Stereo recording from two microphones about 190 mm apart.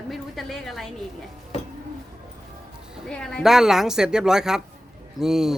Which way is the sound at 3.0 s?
5° left (ahead or behind).